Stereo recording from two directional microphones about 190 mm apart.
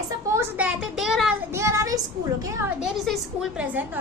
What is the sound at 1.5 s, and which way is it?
Child singing, 15° right (ahead or behind).